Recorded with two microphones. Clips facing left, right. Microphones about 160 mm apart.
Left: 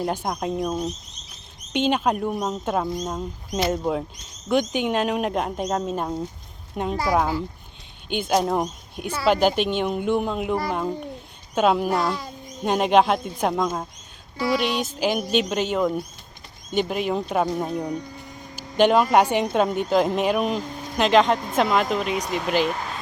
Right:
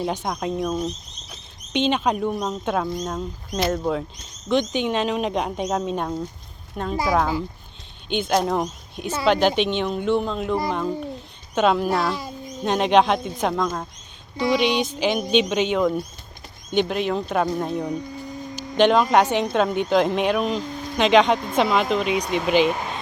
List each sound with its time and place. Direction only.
0.0 s speech: 5° left (ahead or behind)
1.7 s speech: 5° left (ahead or behind)
6.8 s speech: 15° left (ahead or behind)
18.5 s a sound: 10° left (ahead or behind)
19.1 s speech: 10° left (ahead or behind)